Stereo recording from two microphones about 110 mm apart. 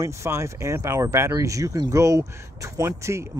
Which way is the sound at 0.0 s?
25° right (ahead or behind).